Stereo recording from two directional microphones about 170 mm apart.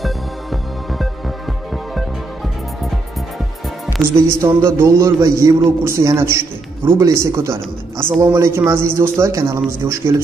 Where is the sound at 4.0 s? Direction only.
15° right (ahead or behind).